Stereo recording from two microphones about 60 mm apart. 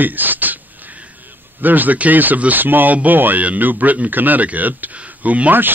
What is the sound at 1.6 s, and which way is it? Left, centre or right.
Speech, right.